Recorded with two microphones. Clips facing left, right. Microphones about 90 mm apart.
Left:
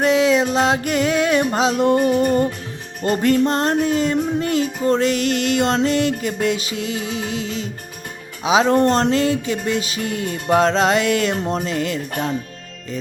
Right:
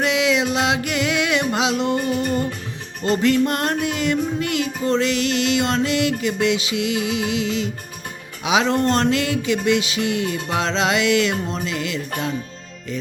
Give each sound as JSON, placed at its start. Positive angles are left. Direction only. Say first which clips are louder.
{"t": 0.0, "sound": "music", "louder": "left 4 dB", "side_deg": 40}